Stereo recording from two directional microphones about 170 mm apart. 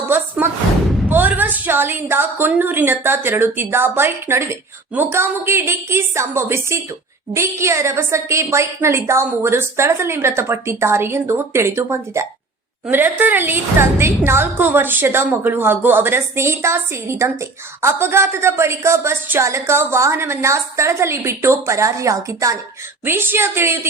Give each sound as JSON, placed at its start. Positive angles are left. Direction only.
{"t": 1.0, "sound": "a woman's voice", "side_deg": -10}